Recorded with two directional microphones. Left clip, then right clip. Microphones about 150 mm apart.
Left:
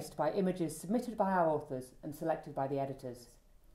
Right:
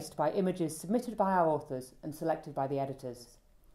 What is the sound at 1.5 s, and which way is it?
Speech, 20° right (ahead or behind).